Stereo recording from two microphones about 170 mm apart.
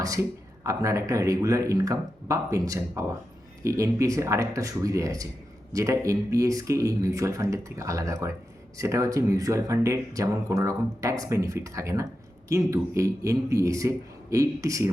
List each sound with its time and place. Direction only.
0.0 s speech: 20° right (ahead or behind)